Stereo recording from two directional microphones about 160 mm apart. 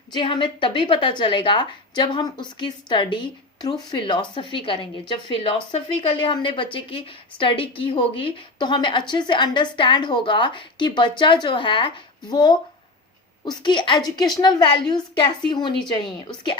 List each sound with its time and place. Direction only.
0.1 s a woman's voice: 30° left (ahead or behind)